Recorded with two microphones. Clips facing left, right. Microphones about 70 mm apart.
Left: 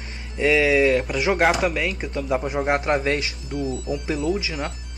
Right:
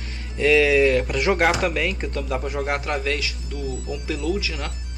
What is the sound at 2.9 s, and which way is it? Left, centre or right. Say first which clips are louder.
Speech: left 3 dB; left.